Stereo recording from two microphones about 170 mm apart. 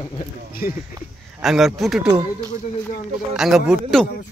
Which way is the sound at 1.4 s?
Centre (ahead or behind).